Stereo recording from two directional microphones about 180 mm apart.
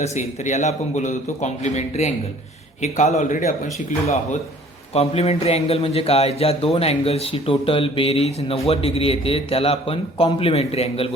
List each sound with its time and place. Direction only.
0.0 s speech: 40° left (ahead or behind)
4.9 s speech: 35° left (ahead or behind)